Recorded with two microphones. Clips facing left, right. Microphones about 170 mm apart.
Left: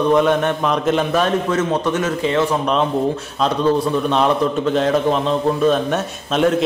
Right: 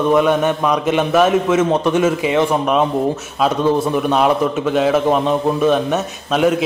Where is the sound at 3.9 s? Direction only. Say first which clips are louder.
Right 2 dB; 10° right (ahead or behind).